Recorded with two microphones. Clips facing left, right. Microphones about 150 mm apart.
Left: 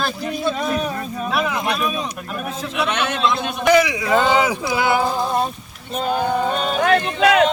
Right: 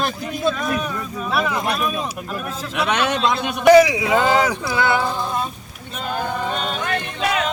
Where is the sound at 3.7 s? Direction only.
40° right (ahead or behind).